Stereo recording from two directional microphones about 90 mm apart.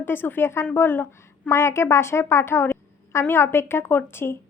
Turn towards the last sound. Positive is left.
turn(degrees=25)  # may be behind; listen again after turning